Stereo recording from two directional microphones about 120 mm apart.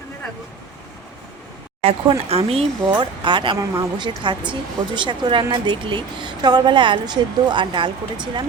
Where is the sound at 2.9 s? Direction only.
40° right (ahead or behind).